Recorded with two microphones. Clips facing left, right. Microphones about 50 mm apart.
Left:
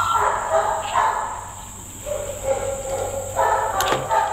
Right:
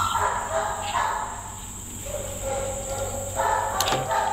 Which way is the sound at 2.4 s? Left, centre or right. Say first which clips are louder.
Left 6 dB; left.